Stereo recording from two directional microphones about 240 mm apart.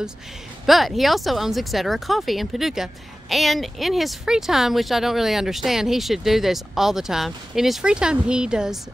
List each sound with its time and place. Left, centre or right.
0.7 s speech: centre